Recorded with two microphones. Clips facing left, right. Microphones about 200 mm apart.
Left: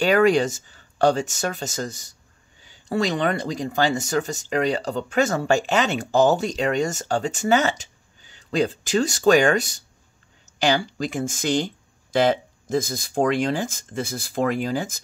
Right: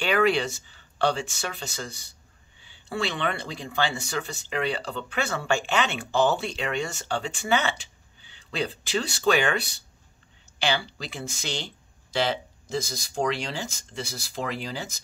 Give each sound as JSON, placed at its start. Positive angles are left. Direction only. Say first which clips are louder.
{"t": 0.0, "sound": "speech", "louder": "left 6 dB", "side_deg": 40}